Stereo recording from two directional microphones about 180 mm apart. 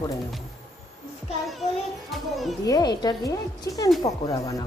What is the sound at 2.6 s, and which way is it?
Speech, 20° left (ahead or behind).